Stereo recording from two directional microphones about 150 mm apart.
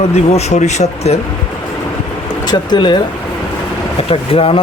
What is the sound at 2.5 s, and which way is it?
Speech, 30° left (ahead or behind).